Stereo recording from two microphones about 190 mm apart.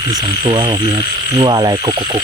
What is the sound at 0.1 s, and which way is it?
Speech, 25° right (ahead or behind).